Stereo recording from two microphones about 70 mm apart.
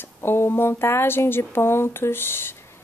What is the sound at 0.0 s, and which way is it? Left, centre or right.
A woman's voice, left.